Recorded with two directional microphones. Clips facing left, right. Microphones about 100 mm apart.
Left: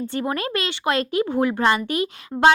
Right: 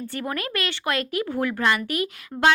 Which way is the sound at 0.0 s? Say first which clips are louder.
Left 4 dB; 25° left (ahead or behind).